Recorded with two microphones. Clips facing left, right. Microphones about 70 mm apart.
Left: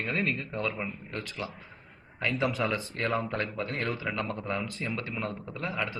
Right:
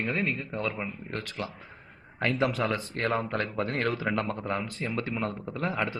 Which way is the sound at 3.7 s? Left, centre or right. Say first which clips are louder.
Right 4 dB; right.